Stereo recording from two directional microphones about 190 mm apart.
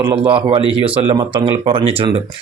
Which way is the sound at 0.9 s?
10° right (ahead or behind).